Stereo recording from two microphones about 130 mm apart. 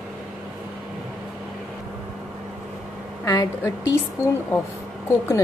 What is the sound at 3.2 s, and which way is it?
A woman's voice, 25° left (ahead or behind).